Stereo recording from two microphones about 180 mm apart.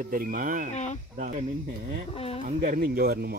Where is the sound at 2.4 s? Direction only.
50° right (ahead or behind).